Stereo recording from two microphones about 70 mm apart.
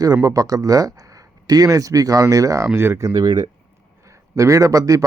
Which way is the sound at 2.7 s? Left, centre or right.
Right.